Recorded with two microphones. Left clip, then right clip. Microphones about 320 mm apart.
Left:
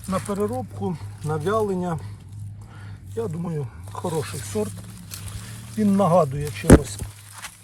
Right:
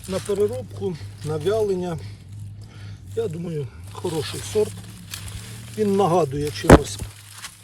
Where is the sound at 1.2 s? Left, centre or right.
Left.